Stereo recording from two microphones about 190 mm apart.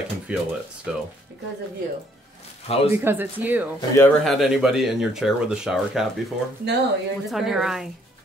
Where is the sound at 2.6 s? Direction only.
30° left (ahead or behind).